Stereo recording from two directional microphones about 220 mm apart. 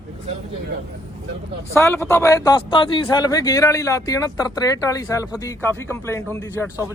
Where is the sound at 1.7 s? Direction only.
10° left (ahead or behind).